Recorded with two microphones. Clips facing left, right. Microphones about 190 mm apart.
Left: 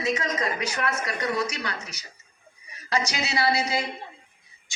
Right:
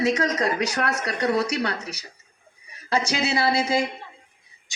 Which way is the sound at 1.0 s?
35° right (ahead or behind).